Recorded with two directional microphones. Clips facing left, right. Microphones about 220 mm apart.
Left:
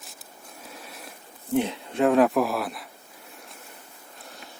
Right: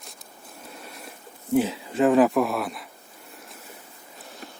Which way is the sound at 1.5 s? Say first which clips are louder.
Right 2 dB; 5° right (ahead or behind).